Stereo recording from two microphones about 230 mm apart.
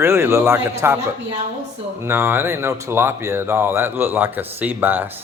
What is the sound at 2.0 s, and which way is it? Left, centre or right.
Speech, centre.